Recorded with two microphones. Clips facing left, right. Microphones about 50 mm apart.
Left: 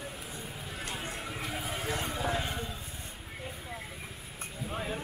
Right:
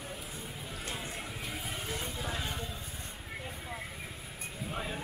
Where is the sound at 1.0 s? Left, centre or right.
Left.